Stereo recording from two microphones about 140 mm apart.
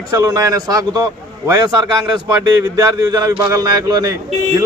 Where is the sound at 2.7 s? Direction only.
25° right (ahead or behind).